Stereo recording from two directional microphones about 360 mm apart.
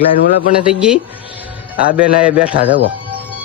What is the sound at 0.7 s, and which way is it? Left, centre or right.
Speech, centre.